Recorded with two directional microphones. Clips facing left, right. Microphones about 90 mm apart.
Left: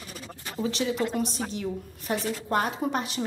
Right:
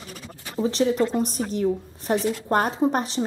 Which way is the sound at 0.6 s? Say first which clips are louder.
Right 6 dB; 35° right (ahead or behind).